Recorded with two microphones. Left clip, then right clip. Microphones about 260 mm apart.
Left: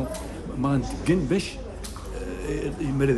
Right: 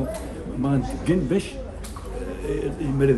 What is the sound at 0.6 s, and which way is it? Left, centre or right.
Speech, centre.